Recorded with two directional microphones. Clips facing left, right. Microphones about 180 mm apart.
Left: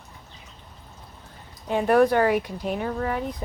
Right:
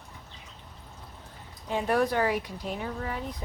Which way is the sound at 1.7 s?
60° left (ahead or behind).